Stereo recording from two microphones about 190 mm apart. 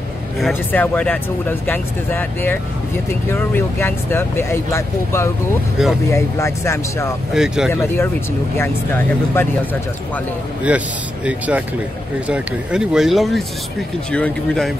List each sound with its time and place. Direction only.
0.4 s speech: 10° left (ahead or behind)
7.3 s speech: 5° right (ahead or behind)
7.7 s speech: 10° left (ahead or behind)
10.7 s speech: 5° right (ahead or behind)